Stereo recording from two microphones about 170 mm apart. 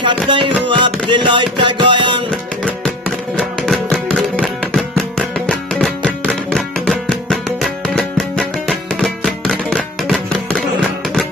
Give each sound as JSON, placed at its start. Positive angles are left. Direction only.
{"t": 0.0, "sound": "music", "side_deg": -30}
{"t": 3.3, "sound": "music", "side_deg": 0}